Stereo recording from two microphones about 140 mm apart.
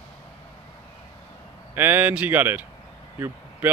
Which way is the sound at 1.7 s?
15° right (ahead or behind).